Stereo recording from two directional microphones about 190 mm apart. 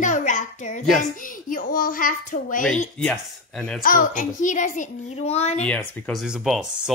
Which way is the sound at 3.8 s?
45° left (ahead or behind).